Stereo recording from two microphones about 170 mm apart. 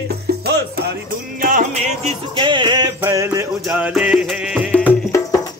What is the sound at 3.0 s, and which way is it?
Music, 20° right (ahead or behind).